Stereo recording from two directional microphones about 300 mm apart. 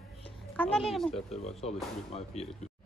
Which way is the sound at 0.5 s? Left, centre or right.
Centre.